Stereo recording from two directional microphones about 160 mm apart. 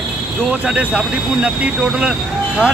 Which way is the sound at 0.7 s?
5° right (ahead or behind).